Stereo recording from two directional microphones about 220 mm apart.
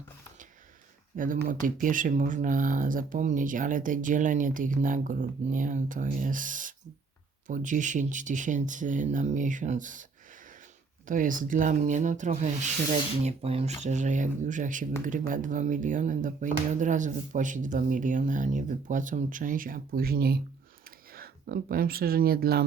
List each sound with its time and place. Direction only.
1.1 s speech: 35° right (ahead or behind)